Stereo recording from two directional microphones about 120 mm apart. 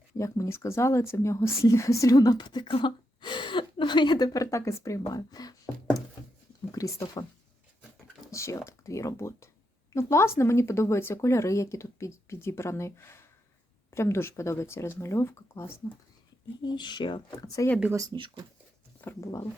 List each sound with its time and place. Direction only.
0.2 s speech: 25° left (ahead or behind)
6.7 s speech: 30° left (ahead or behind)
8.3 s speech: 25° left (ahead or behind)
16.6 s speech: 40° left (ahead or behind)
17.9 s speech: 30° right (ahead or behind)
19.0 s speech: 25° left (ahead or behind)